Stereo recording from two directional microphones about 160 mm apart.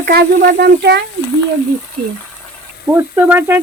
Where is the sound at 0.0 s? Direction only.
80° right.